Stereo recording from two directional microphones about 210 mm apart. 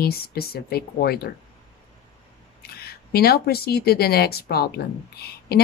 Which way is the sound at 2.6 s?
50° left (ahead or behind).